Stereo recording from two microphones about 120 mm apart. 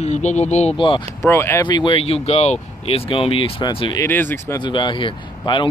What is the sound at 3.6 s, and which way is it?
Speech, 35° left (ahead or behind).